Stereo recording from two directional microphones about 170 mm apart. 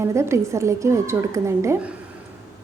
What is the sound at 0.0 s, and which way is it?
A woman's voice, 15° right (ahead or behind).